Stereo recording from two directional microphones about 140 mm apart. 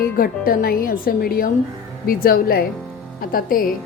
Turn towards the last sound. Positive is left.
turn(degrees=90)